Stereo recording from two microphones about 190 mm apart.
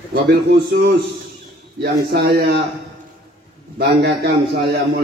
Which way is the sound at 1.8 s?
60° right (ahead or behind).